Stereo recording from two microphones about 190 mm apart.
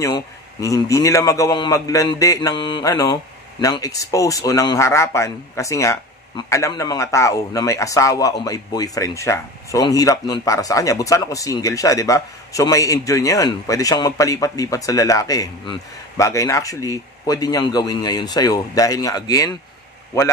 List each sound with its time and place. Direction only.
0.0 s speech: 15° left (ahead or behind)